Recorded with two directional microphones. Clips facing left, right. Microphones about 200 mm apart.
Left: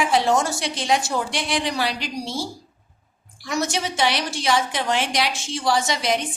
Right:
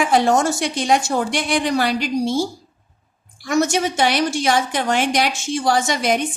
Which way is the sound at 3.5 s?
50° right (ahead or behind).